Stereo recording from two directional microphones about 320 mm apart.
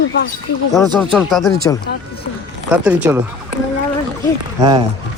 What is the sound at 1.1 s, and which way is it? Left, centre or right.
Speech, centre.